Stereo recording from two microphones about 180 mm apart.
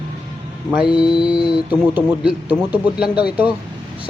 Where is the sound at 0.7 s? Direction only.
5° right (ahead or behind).